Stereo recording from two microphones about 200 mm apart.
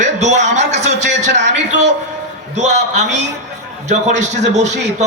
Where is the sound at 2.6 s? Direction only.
35° right (ahead or behind).